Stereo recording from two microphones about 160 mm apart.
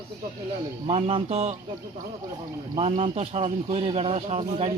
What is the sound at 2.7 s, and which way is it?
Speech, 35° right (ahead or behind).